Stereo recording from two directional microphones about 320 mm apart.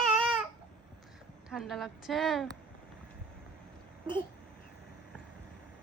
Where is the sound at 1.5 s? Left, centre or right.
Centre.